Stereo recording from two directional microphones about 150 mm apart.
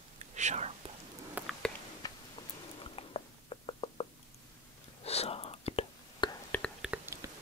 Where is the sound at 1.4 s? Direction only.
10° right (ahead or behind).